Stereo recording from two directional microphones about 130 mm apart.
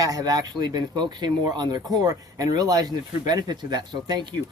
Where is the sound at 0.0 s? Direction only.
30° right (ahead or behind).